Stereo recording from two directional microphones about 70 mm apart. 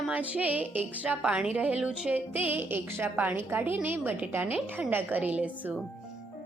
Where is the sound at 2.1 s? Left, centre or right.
Right.